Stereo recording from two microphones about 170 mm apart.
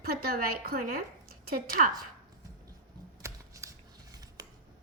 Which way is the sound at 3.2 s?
15° right (ahead or behind).